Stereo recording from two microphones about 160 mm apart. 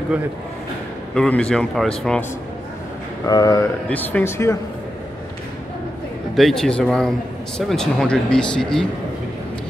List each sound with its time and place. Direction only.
1.1 s a man's voice: 5° left (ahead or behind)
3.3 s speech: 25° left (ahead or behind)
3.9 s speech: 10° left (ahead or behind)
6.3 s a man's voice: centre (ahead or behind)